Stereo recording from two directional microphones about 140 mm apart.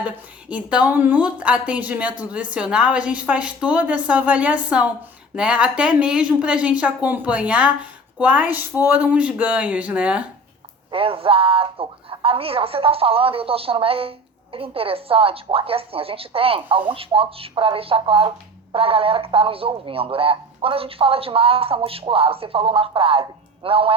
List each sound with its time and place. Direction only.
0.0 s a woman's voice: 10° right (ahead or behind)
10.9 s speech: 40° right (ahead or behind)